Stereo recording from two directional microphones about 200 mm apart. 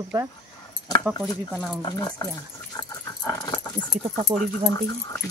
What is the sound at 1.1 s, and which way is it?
Speech, 20° left (ahead or behind).